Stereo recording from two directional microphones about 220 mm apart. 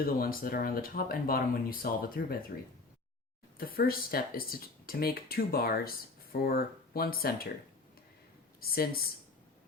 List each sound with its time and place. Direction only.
0.0 s speech: 40° left (ahead or behind)
3.6 s speech: 40° left (ahead or behind)
8.7 s speech: 40° left (ahead or behind)